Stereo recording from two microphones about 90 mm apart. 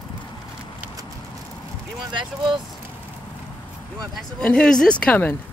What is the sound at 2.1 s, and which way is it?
Speech, 60° right (ahead or behind).